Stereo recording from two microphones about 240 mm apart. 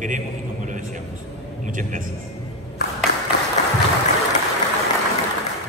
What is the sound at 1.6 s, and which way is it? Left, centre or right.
Speech, right.